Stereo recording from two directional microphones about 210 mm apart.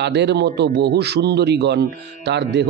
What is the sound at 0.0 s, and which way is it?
A man's voice, 55° right (ahead or behind).